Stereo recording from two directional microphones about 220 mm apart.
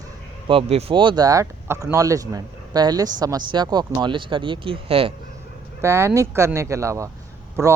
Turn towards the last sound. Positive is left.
turn(degrees=-15)  # may be behind; listen again after turning